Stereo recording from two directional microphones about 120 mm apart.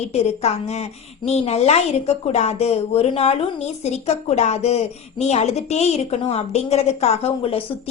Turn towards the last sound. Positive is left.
turn(degrees=55)  # may be behind; listen again after turning